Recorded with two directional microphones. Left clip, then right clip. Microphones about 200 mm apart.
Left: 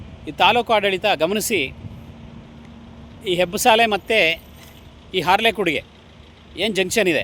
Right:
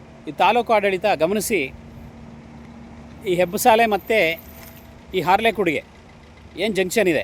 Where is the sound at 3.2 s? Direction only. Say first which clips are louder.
Even; 10° right (ahead or behind).